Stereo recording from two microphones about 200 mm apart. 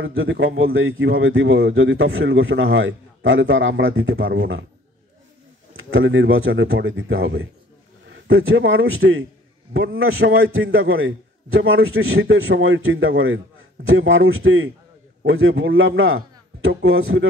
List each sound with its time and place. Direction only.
0.0 s speech: 85° right
4.3 s speech: 70° right (ahead or behind)
5.8 s a man's voice: 85° right